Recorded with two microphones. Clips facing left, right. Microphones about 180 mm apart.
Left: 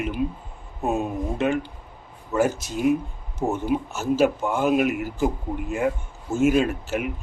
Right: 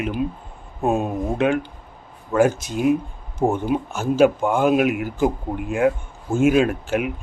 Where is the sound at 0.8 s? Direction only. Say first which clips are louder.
Right 4 dB; 50° right (ahead or behind).